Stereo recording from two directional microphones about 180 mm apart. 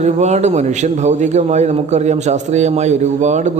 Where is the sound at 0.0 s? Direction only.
40° right (ahead or behind).